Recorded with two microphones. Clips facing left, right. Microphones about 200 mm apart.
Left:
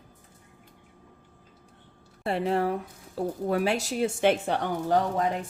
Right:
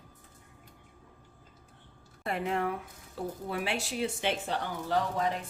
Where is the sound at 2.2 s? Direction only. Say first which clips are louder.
Left 5 dB; 30° left (ahead or behind); by 5.3 s 50° left (ahead or behind).